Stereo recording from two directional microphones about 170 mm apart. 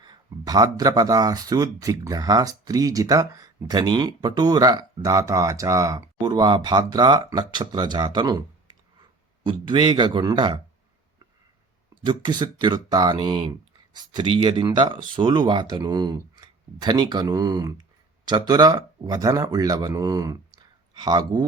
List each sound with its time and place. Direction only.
0.0 s speech: 25° right (ahead or behind)
12.0 s speech: 25° right (ahead or behind)